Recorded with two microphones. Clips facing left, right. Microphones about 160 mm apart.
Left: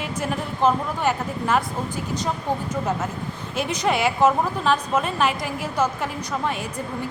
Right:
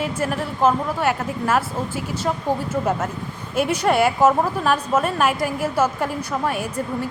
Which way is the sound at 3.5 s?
10° right (ahead or behind).